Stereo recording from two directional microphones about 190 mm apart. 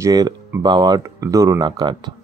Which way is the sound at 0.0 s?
15° right (ahead or behind).